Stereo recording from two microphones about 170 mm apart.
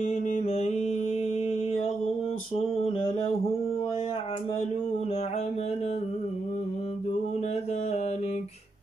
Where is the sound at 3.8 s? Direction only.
30° left (ahead or behind).